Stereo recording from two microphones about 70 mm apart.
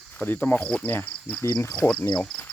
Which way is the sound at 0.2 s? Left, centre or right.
Left.